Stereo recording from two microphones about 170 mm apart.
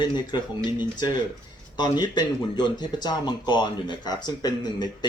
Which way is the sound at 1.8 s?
25° left (ahead or behind).